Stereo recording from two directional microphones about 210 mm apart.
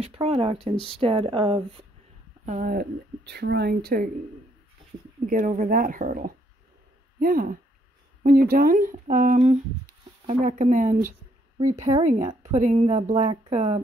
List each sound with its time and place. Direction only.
0.0 s speech: 30° right (ahead or behind)
2.4 s speech: 40° right (ahead or behind)
5.3 s speech: 40° right (ahead or behind)